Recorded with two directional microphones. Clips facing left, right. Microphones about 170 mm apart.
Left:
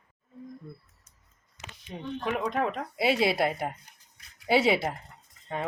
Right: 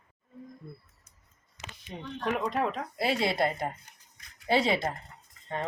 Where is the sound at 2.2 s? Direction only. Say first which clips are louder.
Even; centre (ahead or behind).